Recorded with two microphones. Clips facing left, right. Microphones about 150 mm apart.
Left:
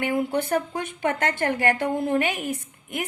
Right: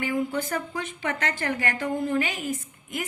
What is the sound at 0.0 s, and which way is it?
A woman's voice, 65° left (ahead or behind).